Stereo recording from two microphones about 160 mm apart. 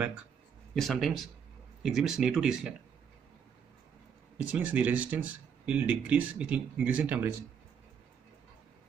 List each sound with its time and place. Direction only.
0.7 s speech: centre (ahead or behind)
4.5 s speech: 10° right (ahead or behind)